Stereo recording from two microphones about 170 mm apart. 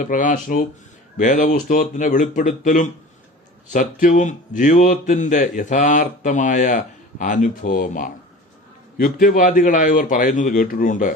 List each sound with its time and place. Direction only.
0.0 s speech: 50° left (ahead or behind)